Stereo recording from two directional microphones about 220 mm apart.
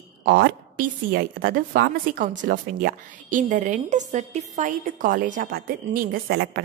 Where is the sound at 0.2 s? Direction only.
45° right (ahead or behind).